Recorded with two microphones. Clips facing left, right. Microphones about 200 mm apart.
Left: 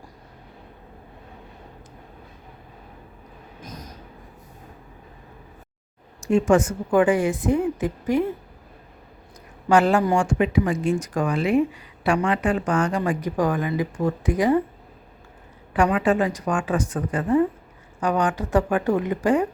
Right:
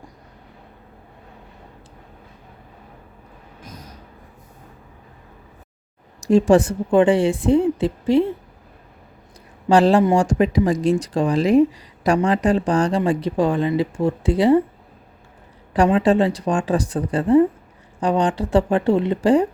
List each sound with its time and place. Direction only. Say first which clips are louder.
6.1 s a woman's voice: right 4 dB; 35° right (ahead or behind)
9.6 s a woman's voice: right 4 dB; 35° right (ahead or behind)
15.7 s speech: right 4 dB; 30° right (ahead or behind)